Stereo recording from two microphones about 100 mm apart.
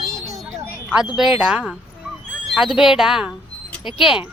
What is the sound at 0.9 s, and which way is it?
Speech, 5° right (ahead or behind).